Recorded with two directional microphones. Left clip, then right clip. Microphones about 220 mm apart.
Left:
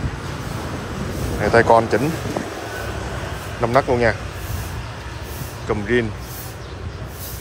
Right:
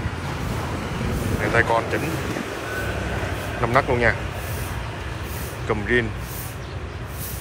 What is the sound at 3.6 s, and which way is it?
Speech, 15° left (ahead or behind).